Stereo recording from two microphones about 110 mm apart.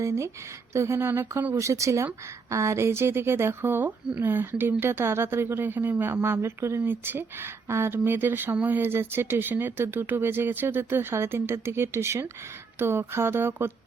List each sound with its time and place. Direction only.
0.0 s speech: 25° right (ahead or behind)